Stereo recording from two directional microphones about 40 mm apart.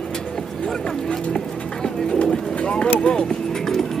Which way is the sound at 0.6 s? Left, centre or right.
Left.